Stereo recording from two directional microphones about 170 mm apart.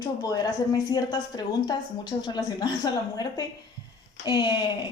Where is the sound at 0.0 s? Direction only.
20° left (ahead or behind).